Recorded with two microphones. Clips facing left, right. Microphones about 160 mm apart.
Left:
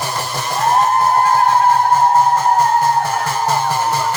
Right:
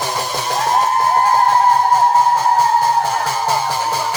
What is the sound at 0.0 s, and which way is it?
Music, 15° right (ahead or behind).